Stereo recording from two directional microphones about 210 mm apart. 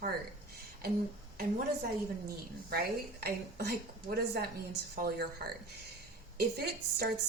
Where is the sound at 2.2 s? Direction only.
45° right (ahead or behind).